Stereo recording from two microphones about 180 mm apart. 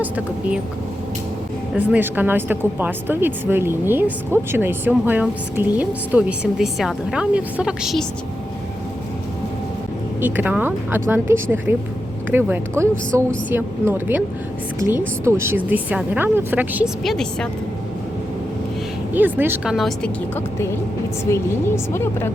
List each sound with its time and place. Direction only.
0.0 s speech: 10° right (ahead or behind)
1.7 s speech: 10° right (ahead or behind)
10.2 s speech: 10° right (ahead or behind)
19.1 s speech: 10° right (ahead or behind)
19.7 s speech: 5° left (ahead or behind)